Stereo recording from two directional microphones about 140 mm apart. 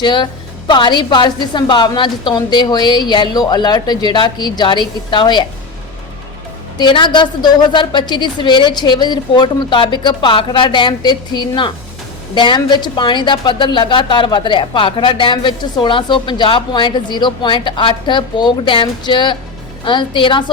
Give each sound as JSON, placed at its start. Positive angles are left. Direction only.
{"t": 0.0, "sound": "a woman's voice", "side_deg": 35}
{"t": 6.7, "sound": "a woman's voice", "side_deg": 35}